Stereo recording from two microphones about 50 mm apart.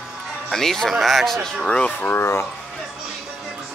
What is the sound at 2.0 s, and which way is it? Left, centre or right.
Speech, left.